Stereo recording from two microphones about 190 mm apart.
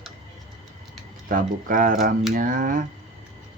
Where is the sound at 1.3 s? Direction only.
45° right (ahead or behind).